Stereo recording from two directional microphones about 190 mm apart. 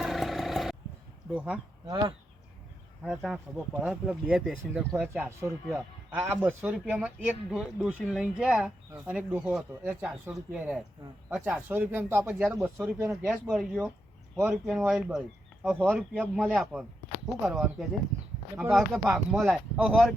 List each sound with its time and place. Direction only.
0.0 s vehicle: centre (ahead or behind)
1.3 s speech: 5° right (ahead or behind)
1.9 s speech: 20° right (ahead or behind)
3.0 s speech: centre (ahead or behind)
13.2 s speech: centre (ahead or behind)